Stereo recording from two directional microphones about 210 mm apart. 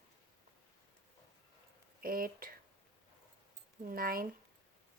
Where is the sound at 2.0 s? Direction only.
45° right (ahead or behind).